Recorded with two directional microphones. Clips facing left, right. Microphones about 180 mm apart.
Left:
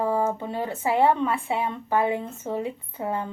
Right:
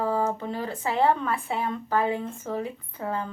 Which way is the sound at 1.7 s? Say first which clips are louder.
Even; 20° left (ahead or behind).